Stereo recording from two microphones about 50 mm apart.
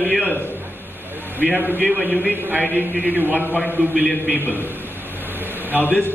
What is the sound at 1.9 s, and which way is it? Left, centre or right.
Speech, centre.